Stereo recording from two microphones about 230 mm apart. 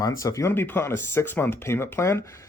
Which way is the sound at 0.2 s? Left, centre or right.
Centre.